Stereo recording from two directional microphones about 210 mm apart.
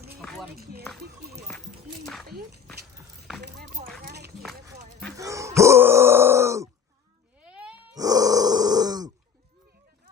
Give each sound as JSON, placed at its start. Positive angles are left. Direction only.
{"t": 0.2, "sound": "run", "side_deg": 0}
{"t": 0.5, "sound": "run", "side_deg": -50}
{"t": 1.2, "sound": "speech", "side_deg": -50}
{"t": 1.5, "sound": "a sound", "side_deg": 0}
{"t": 2.2, "sound": "speech", "side_deg": -50}
{"t": 3.4, "sound": "a sound", "side_deg": -50}
{"t": 4.0, "sound": "run", "side_deg": -50}
{"t": 5.1, "sound": "dog", "side_deg": -15}
{"t": 5.5, "sound": "grunt", "side_deg": -10}
{"t": 7.3, "sound": "cat", "side_deg": -5}
{"t": 7.9, "sound": "grunt", "side_deg": -15}